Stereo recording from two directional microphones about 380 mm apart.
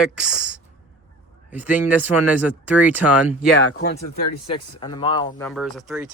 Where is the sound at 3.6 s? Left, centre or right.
Left.